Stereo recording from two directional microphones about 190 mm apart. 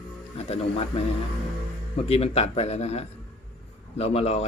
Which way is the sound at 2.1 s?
30° left (ahead or behind).